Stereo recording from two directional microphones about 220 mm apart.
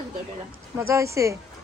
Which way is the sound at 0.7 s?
10° right (ahead or behind).